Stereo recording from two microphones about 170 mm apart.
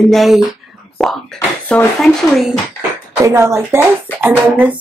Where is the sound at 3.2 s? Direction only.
15° right (ahead or behind).